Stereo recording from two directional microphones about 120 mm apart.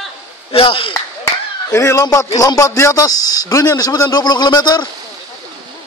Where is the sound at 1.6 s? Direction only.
25° left (ahead or behind).